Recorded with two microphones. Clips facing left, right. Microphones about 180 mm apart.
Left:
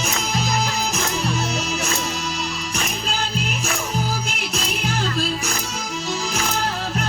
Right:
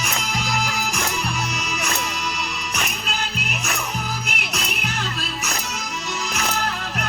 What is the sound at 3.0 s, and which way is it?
Music, 30° left (ahead or behind).